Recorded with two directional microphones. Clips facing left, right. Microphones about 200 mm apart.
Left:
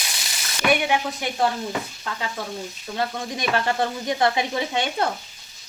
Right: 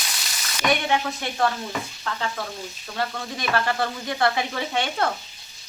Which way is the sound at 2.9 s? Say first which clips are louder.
Left 2 dB; 20° left (ahead or behind).